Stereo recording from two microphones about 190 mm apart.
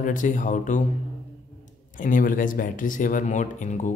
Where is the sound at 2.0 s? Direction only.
45° left (ahead or behind).